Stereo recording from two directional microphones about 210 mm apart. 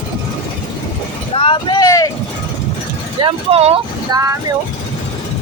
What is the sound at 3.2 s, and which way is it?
Speech, 25° right (ahead or behind).